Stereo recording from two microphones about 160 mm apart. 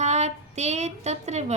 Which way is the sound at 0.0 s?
45° right (ahead or behind).